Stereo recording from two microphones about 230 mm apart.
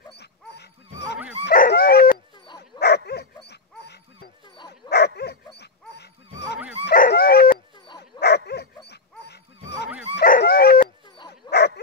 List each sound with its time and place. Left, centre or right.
0.1 s dog: left
2.4 s dog: centre
2.8 s dog: left